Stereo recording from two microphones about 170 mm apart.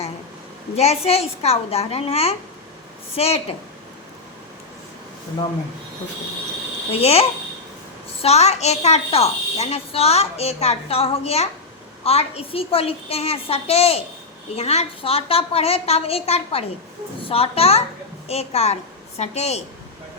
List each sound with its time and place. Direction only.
0.8 s a child's voice: 40° left (ahead or behind)
6.9 s a child's voice: 35° left (ahead or behind)